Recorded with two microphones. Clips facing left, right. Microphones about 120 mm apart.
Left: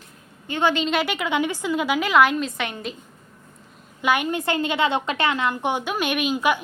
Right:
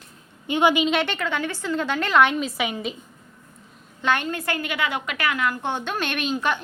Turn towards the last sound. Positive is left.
turn(degrees=10)  # may be behind; listen again after turning